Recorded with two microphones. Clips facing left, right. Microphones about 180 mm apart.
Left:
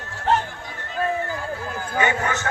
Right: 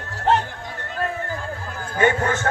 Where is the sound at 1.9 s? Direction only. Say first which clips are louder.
Right 3 dB; 50° right (ahead or behind).